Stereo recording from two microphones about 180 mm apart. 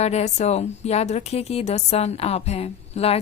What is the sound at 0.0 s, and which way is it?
A woman's voice, 40° left (ahead or behind).